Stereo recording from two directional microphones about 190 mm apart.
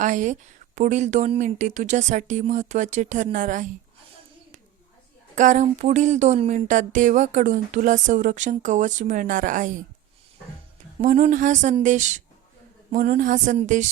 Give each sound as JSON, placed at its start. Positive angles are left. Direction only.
{"t": 0.0, "sound": "speech", "side_deg": -40}
{"t": 5.3, "sound": "speech", "side_deg": -40}
{"t": 11.0, "sound": "speech", "side_deg": -40}